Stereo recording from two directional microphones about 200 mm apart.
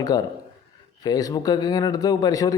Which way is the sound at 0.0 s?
20° left (ahead or behind).